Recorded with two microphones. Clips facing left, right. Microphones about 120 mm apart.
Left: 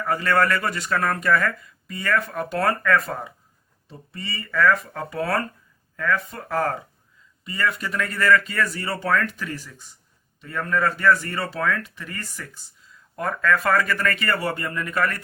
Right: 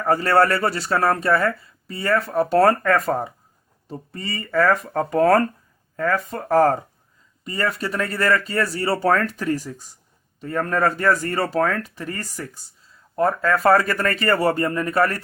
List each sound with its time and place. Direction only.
0.0 s speech: 35° right (ahead or behind)